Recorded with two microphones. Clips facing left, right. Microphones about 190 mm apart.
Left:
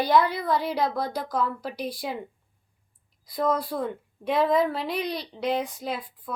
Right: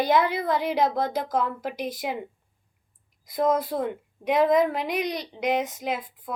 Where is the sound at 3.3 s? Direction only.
20° right (ahead or behind).